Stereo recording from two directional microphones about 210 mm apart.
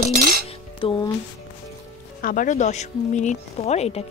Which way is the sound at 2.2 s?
40° left (ahead or behind).